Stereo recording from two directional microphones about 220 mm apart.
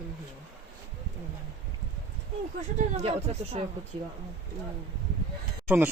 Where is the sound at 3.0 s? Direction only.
25° right (ahead or behind).